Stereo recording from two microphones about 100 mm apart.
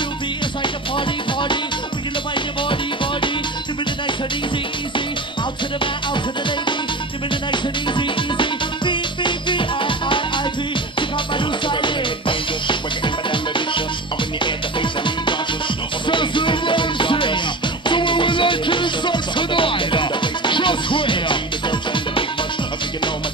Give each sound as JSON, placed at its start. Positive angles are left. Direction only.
{"t": 2.3, "sound": "music", "side_deg": 55}
{"t": 7.5, "sound": "music", "side_deg": 55}